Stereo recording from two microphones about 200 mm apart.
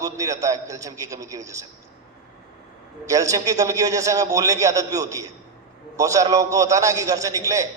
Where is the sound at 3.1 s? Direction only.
15° right (ahead or behind).